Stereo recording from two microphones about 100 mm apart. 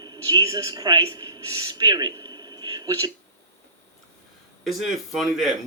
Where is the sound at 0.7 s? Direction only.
50° right (ahead or behind).